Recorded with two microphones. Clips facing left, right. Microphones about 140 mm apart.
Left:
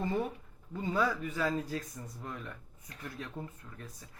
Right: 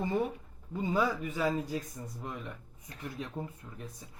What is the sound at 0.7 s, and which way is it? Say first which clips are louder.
A man's voice: right 1 dB; 15° right (ahead or behind).